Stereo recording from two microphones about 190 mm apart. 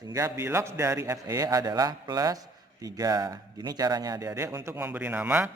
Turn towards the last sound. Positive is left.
turn(degrees=-10)  # may be behind; listen again after turning